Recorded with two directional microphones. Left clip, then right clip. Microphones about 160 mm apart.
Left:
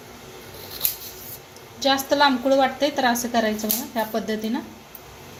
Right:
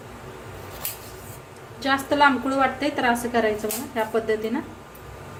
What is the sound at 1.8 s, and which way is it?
A woman's voice, 25° left (ahead or behind).